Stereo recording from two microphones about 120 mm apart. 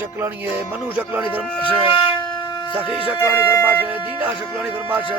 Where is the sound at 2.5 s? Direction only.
35° left (ahead or behind).